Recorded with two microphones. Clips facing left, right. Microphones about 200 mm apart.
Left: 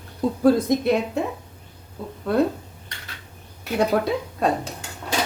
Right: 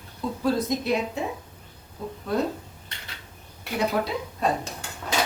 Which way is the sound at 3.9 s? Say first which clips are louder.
Left 4 dB; 65° left (ahead or behind).